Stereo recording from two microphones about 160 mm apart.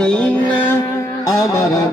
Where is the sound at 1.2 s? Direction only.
20° left (ahead or behind).